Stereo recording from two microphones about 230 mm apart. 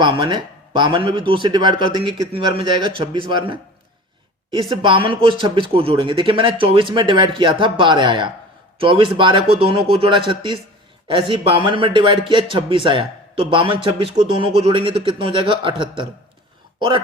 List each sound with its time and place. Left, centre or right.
0.0 s a man's voice: right
4.7 s a man's voice: right